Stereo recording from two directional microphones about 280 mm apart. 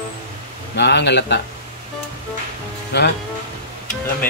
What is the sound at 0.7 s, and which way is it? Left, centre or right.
Speech, left.